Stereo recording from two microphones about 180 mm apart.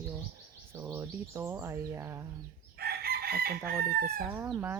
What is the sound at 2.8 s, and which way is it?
Chicken, 60° right (ahead or behind).